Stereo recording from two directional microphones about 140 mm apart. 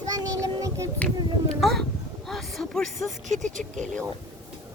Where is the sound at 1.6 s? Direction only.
Centre (ahead or behind).